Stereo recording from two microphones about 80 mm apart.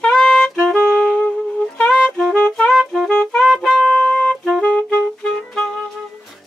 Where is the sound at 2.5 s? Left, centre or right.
Centre.